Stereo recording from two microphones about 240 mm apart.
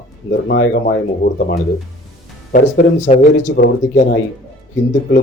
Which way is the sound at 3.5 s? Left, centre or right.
Left.